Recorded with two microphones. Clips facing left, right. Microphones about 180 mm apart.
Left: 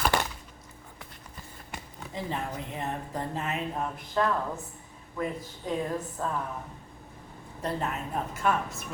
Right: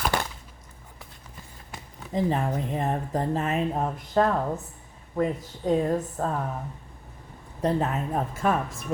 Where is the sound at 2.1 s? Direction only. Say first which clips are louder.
Right 8 dB; 45° right (ahead or behind).